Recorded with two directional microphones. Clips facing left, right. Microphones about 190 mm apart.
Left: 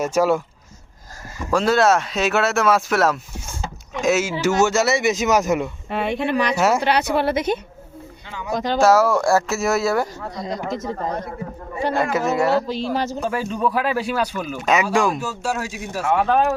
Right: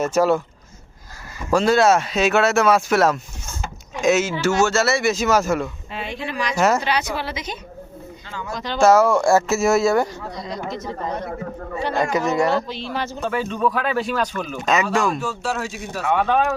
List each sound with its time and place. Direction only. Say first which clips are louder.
0.0 s speech: even; 10° left (ahead or behind)
1.5 s speech: right 1 dB; centre (ahead or behind); by 5.7 s 15° left (ahead or behind)
5.9 s a woman's voice: left 7 dB; 60° left (ahead or behind)
6.6 s speech: right 3 dB; 10° left (ahead or behind)
6.8 s a woman's voice: left 5 dB; 60° left (ahead or behind)
8.3 s speech: left 3 dB; 15° left (ahead or behind)
8.5 s speech: left 7 dB; 45° left (ahead or behind)
8.8 s speech: right 2 dB; 5° left (ahead or behind)
10.3 s speech: left 4 dB; 45° left (ahead or behind)
11.9 s speech: right 1 dB; 5° left (ahead or behind)
12.6 s speech: left 4 dB; 40° left (ahead or behind)
13.2 s speech: even; 10° left (ahead or behind)